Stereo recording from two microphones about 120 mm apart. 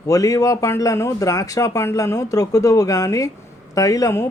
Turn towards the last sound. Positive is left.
turn(degrees=25)  # may be behind; listen again after turning